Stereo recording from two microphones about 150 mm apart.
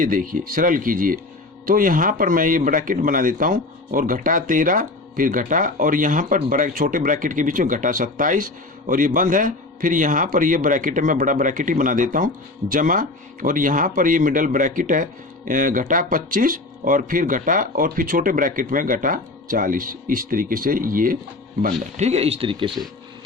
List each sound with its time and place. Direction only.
0.0 s a man's voice: 65° right (ahead or behind)
21.7 s speech: 45° right (ahead or behind)